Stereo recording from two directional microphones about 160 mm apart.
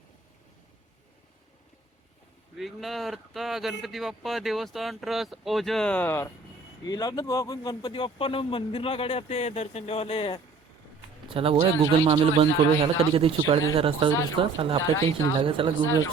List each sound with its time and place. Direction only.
2.6 s speech: centre (ahead or behind)
6.8 s a man's voice: 25° left (ahead or behind)
11.3 s speech: 35° right (ahead or behind)